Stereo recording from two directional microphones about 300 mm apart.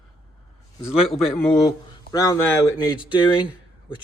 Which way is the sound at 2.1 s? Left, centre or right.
Centre.